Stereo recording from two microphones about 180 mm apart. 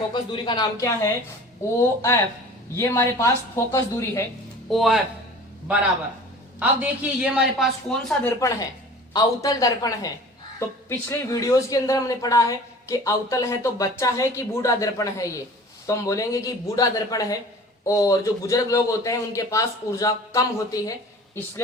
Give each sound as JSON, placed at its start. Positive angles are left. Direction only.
{"t": 0.1, "sound": "a man's voice", "side_deg": 25}
{"t": 4.7, "sound": "a man's voice", "side_deg": 0}
{"t": 6.6, "sound": "a man's voice", "side_deg": -10}
{"t": 8.4, "sound": "a man's voice", "side_deg": 15}